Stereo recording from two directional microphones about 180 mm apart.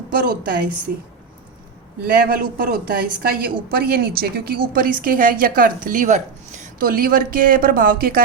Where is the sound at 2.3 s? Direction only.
55° right (ahead or behind).